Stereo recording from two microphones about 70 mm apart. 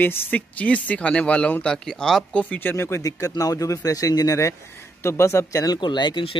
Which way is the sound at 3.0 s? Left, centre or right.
Left.